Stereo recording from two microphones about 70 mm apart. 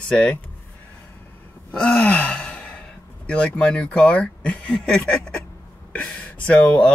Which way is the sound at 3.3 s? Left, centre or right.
Centre.